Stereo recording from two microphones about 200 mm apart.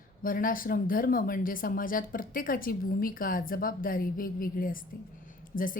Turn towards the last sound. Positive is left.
turn(degrees=45)  # may be behind; listen again after turning